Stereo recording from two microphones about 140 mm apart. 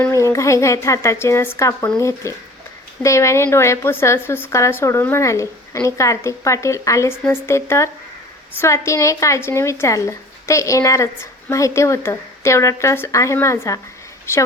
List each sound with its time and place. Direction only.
0.0 s a woman's voice: 20° left (ahead or behind)